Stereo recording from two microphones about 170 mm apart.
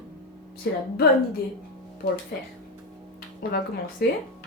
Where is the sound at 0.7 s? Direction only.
70° left (ahead or behind).